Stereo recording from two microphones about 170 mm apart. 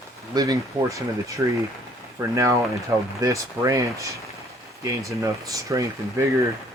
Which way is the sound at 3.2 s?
20° right (ahead or behind).